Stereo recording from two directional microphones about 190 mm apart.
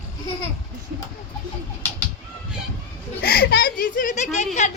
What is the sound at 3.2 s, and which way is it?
Speech, 55° left (ahead or behind).